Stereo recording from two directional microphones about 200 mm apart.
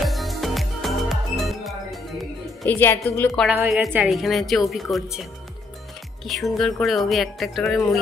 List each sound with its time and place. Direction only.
0.0 s music: centre (ahead or behind)
3.4 s a woman's voice: 10° right (ahead or behind)
6.2 s speech: centre (ahead or behind)